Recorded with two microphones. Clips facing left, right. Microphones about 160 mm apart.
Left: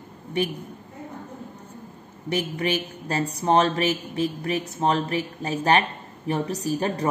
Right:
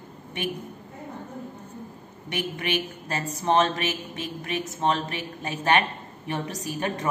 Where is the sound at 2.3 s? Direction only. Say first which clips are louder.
Left 4 dB; 35° left (ahead or behind).